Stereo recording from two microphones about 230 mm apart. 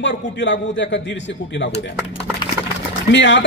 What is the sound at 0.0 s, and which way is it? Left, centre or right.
A man's voice, left.